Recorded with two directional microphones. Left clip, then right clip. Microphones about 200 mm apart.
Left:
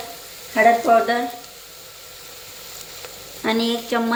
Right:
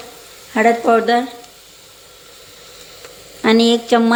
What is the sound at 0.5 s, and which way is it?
Speech, 60° right (ahead or behind).